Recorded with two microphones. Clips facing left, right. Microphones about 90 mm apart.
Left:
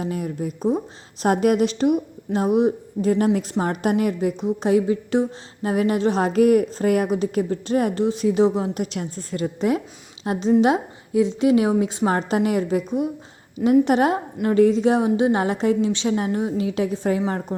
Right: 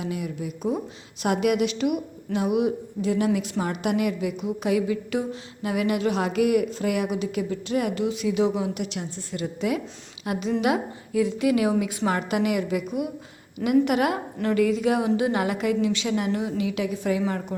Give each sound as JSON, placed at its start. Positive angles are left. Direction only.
{"t": 0.0, "sound": "a woman's voice", "side_deg": 40}